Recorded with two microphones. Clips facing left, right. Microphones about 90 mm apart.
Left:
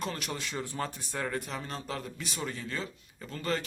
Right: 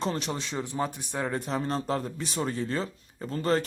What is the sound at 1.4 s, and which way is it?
Speech, 35° right (ahead or behind).